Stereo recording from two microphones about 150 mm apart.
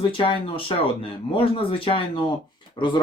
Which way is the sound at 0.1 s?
35° left (ahead or behind).